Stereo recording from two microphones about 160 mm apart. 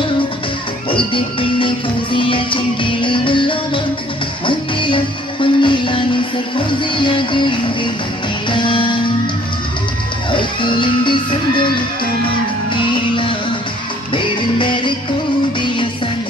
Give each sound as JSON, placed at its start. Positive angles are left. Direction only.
{"t": 0.8, "sound": "music", "side_deg": 30}
{"t": 10.3, "sound": "music", "side_deg": 30}
{"t": 14.1, "sound": "music", "side_deg": 30}